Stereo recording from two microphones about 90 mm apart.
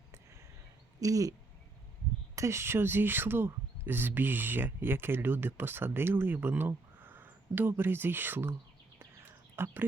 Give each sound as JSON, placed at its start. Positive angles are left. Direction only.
{"t": 0.9, "sound": "speech", "side_deg": -40}
{"t": 2.3, "sound": "speech", "side_deg": -35}
{"t": 9.0, "sound": "bird", "side_deg": -25}